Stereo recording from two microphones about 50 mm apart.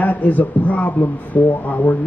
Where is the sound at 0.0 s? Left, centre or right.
Left.